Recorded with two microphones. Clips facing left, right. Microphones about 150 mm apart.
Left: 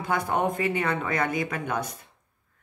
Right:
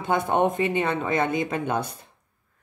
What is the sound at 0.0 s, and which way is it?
Speech, 25° right (ahead or behind).